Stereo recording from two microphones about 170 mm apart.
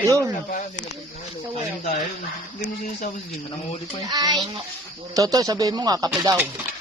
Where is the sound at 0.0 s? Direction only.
20° right (ahead or behind).